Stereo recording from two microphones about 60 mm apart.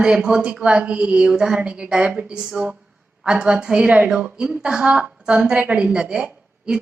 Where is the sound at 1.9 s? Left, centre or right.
Centre; by 4.0 s right.